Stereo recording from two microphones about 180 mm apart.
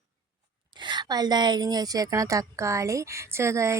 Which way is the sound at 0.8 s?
25° right (ahead or behind).